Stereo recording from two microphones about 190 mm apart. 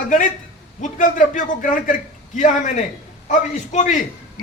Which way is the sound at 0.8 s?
45° left (ahead or behind).